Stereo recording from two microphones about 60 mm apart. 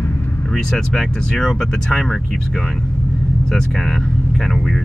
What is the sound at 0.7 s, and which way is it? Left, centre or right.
Speech, centre.